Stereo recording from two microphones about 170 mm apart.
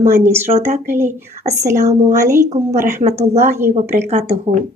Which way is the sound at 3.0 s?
40° right (ahead or behind).